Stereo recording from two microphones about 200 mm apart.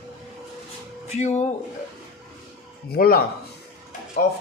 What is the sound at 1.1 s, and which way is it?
Speech, 35° left (ahead or behind).